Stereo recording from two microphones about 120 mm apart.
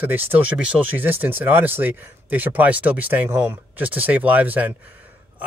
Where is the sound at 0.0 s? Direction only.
15° right (ahead or behind).